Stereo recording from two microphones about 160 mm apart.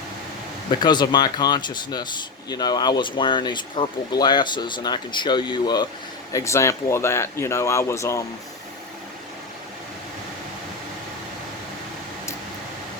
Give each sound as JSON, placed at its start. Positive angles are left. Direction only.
{"t": 0.7, "sound": "speech", "side_deg": 25}